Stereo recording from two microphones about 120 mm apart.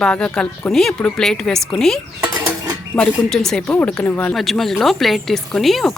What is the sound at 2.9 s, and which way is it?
Speech, 5° left (ahead or behind).